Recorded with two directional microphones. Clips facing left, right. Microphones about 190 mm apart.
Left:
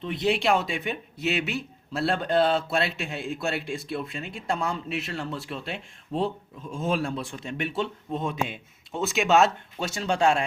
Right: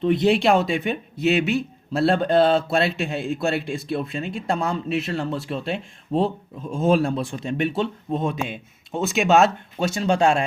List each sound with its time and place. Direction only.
0.0 s a man's voice: 40° right (ahead or behind); by 9.9 s 15° right (ahead or behind)